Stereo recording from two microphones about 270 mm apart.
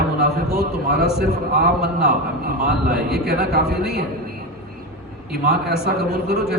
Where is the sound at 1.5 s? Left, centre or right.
Right.